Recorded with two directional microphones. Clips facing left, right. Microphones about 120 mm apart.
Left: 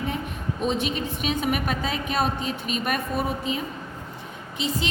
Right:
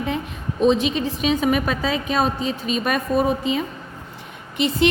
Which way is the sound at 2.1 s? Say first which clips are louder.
Right 3 dB; 90° right.